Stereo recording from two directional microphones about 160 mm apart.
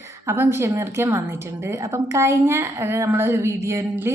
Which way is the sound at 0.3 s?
15° right (ahead or behind).